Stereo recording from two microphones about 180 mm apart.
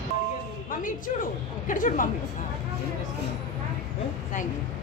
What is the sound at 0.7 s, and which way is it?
A woman's voice, 50° left (ahead or behind).